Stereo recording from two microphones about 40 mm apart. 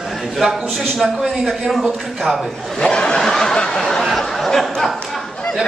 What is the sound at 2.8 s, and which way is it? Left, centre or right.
Snicker, centre.